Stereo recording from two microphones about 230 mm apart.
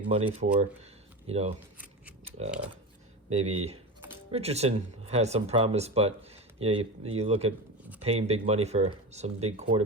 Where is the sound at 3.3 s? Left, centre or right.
Right.